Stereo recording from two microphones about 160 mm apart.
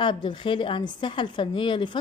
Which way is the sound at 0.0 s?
30° left (ahead or behind).